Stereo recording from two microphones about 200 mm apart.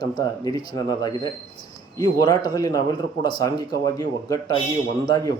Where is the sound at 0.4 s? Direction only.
20° left (ahead or behind).